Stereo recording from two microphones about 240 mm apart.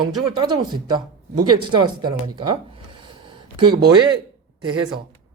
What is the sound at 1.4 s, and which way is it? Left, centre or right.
Speech, right.